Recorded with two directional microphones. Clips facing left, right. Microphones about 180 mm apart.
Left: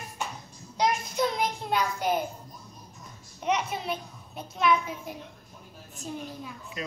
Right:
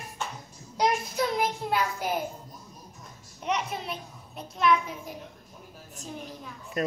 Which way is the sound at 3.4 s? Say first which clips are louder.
Left 2 dB; centre (ahead or behind).